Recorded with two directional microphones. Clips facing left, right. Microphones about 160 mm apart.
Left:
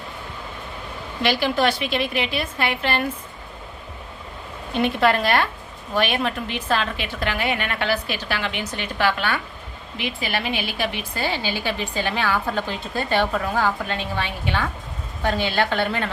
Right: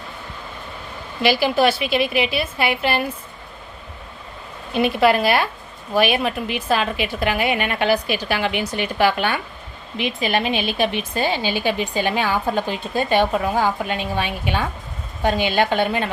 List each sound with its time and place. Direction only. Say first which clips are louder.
1.2 s a woman's voice: right 3 dB; 10° right (ahead or behind)
4.7 s a woman's voice: right 3 dB; 10° right (ahead or behind)